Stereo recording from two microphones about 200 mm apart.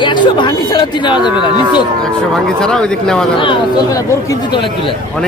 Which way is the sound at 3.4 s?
25° left (ahead or behind).